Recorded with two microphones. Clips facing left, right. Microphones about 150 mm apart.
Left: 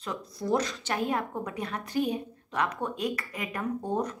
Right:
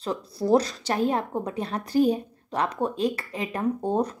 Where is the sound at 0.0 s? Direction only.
30° right (ahead or behind).